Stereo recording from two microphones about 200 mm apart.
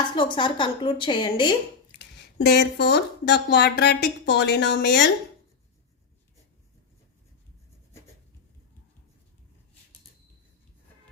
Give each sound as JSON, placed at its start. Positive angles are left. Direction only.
{"t": 0.2, "sound": "a woman's voice", "side_deg": 25}
{"t": 2.0, "sound": "speech", "side_deg": 55}